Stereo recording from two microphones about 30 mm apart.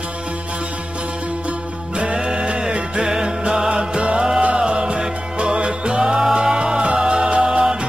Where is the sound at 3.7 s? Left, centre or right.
Right.